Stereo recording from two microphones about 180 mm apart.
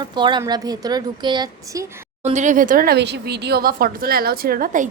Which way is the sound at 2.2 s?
40° right (ahead or behind).